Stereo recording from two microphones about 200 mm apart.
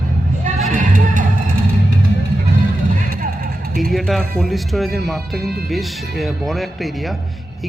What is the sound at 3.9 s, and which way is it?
Speech, centre (ahead or behind).